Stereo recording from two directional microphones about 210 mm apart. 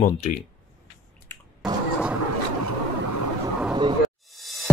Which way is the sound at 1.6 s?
5° right (ahead or behind).